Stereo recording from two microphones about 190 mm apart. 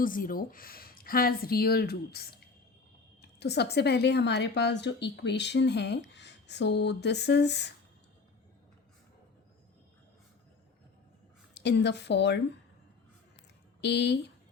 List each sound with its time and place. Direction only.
0.0 s a woman's voice: 45° left (ahead or behind); by 7.7 s 60° left (ahead or behind)
11.5 s a woman's voice: 65° left (ahead or behind)
13.8 s a woman's voice: 65° left (ahead or behind)